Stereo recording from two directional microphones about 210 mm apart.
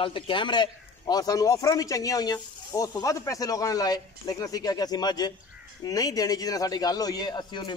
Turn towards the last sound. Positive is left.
turn(degrees=20)  # may be behind; listen again after turning